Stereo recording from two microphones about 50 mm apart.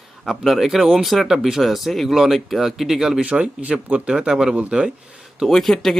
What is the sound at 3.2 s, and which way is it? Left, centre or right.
Speech, right.